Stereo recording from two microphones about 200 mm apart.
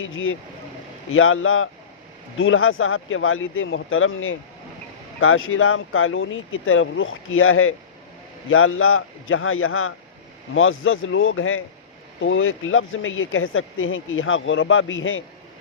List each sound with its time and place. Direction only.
0.0 s speech: 80° left
1.1 s speech: 90° left; by 15.2 s 75° left (ahead or behind)